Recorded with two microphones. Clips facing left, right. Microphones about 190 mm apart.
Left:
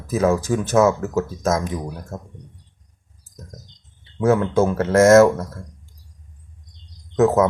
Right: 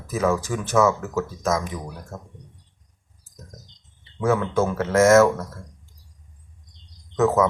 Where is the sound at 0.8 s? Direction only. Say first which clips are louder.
Left 3 dB; 45° left (ahead or behind).